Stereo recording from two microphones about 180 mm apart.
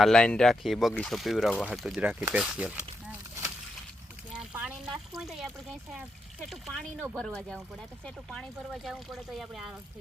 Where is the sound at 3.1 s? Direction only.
15° right (ahead or behind).